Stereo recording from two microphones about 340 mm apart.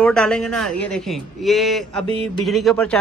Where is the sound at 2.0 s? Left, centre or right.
Centre.